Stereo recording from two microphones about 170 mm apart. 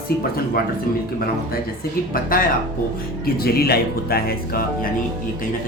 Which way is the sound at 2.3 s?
55° left (ahead or behind).